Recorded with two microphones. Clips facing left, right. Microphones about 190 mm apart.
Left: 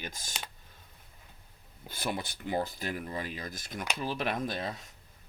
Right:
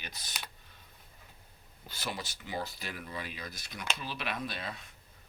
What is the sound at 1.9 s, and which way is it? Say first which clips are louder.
Speech: left 5 dB; 55° left (ahead or behind).